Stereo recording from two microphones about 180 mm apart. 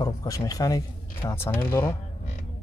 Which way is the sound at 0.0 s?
20° left (ahead or behind).